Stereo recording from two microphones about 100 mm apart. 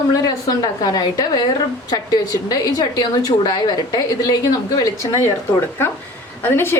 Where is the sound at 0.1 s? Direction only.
35° left (ahead or behind).